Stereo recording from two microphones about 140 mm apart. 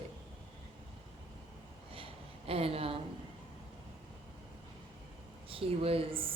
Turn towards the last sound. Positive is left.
turn(degrees=-40)  # may be behind; listen again after turning